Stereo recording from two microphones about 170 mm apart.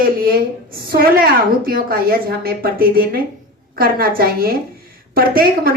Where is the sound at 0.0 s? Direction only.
60° right (ahead or behind).